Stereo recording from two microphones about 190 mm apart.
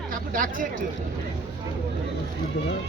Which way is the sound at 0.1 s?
45° right (ahead or behind).